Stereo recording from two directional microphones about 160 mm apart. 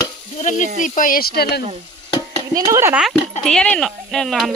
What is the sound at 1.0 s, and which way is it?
Speech, 60° left (ahead or behind).